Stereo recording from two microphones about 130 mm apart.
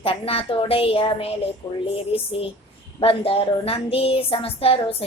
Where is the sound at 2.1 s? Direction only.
45° left (ahead or behind).